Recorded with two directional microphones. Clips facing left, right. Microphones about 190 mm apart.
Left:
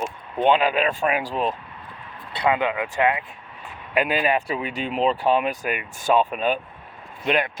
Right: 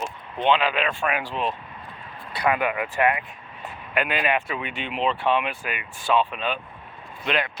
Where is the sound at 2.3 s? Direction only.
25° left (ahead or behind).